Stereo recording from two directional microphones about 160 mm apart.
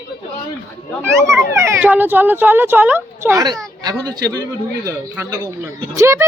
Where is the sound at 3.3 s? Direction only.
25° right (ahead or behind).